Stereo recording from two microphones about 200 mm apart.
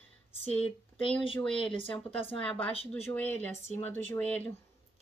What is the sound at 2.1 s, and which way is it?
Speech, 25° left (ahead or behind).